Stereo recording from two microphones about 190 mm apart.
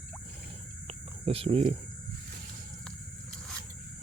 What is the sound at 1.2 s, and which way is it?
Speech, 30° right (ahead or behind).